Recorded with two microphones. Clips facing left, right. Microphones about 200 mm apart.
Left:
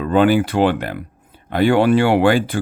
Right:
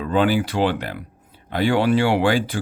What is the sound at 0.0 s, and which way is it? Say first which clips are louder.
Speech: left 5 dB; 55° left (ahead or behind).